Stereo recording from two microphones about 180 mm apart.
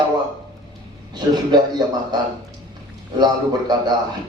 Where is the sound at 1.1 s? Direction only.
25° right (ahead or behind).